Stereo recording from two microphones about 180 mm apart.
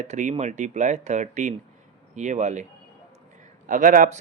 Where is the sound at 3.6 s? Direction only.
45° right (ahead or behind).